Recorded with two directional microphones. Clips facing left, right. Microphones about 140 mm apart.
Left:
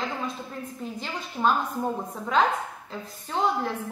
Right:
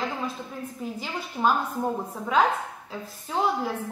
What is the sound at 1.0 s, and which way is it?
A woman's voice, 5° right (ahead or behind).